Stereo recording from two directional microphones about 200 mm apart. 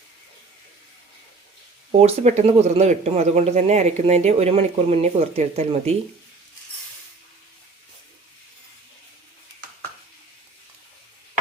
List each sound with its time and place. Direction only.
1.9 s speech: 35° right (ahead or behind)